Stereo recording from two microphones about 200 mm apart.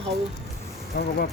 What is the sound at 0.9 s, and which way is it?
Speech, 45° left (ahead or behind).